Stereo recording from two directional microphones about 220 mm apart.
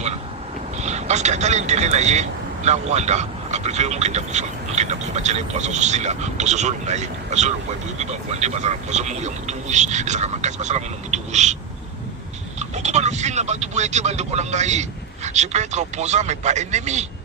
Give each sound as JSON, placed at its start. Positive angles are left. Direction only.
{"t": 0.8, "sound": "speech", "side_deg": -30}
{"t": 12.5, "sound": "speech", "side_deg": -30}